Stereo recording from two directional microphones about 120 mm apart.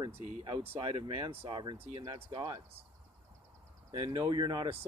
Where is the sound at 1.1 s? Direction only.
50° right (ahead or behind).